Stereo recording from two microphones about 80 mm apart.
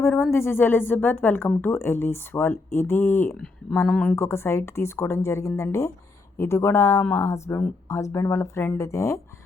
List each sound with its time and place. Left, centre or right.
0.3 s speech: left